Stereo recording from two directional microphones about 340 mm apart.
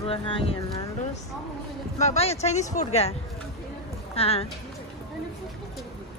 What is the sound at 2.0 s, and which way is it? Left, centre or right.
Speech, centre.